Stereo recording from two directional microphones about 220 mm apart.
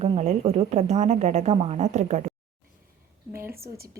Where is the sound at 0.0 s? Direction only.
30° right (ahead or behind).